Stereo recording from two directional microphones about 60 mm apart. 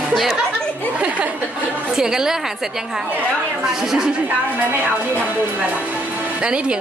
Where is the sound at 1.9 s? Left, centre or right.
Centre.